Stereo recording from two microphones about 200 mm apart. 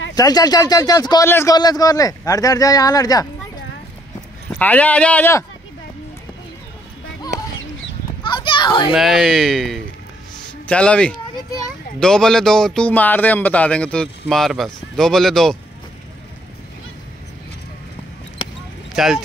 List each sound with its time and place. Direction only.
0.1 s a man's voice: 20° left (ahead or behind)
4.5 s speech: 10° left (ahead or behind)
8.2 s a sound: 25° left (ahead or behind)
8.9 s speech: centre (ahead or behind)
19.0 s speech: centre (ahead or behind)